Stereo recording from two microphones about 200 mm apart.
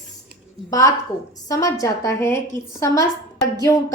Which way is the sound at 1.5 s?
15° left (ahead or behind).